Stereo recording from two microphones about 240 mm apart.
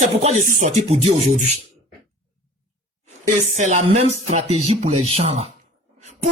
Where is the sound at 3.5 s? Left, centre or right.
Right.